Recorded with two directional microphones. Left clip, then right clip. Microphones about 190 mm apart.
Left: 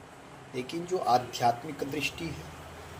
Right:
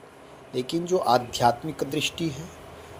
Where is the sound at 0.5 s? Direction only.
40° right (ahead or behind).